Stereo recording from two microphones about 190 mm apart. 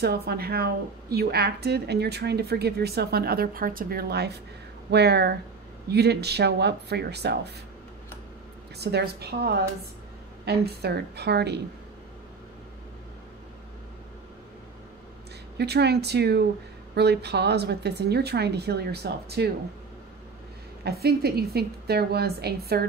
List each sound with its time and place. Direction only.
0.0 s a woman's voice: 55° right (ahead or behind)
8.7 s a woman's voice: 60° right (ahead or behind)
15.5 s a woman's voice: 60° right (ahead or behind)
20.8 s a woman's voice: 55° right (ahead or behind)